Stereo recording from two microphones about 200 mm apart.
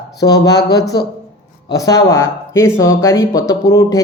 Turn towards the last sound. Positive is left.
turn(degrees=15)  # may be behind; listen again after turning